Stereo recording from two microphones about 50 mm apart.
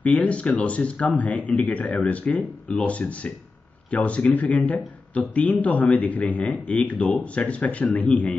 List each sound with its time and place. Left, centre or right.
0.0 s speech: left